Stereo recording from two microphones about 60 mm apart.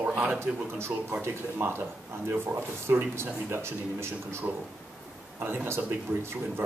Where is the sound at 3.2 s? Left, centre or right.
Right.